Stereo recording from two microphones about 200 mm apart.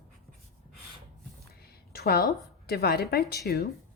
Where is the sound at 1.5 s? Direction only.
50° left (ahead or behind).